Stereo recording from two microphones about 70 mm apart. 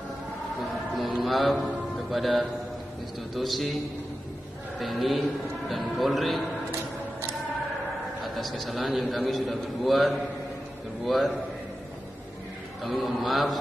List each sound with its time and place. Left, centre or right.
0.9 s mantra: centre
2.0 s a man's voice: centre
4.7 s a man's voice: centre
6.7 s a sound: right
8.2 s a man's voice: centre
12.8 s a man's voice: centre